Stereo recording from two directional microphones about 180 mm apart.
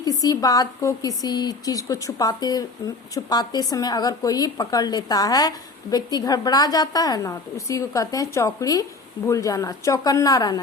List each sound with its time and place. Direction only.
0.0 s speech: 20° left (ahead or behind)